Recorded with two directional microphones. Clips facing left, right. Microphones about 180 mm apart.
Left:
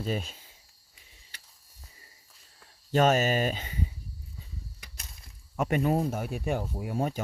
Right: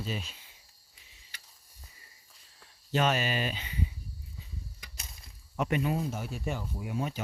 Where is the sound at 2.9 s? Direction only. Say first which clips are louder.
Left 5 dB; 45° left (ahead or behind).